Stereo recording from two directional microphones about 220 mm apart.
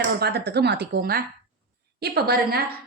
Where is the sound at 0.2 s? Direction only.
50° right (ahead or behind).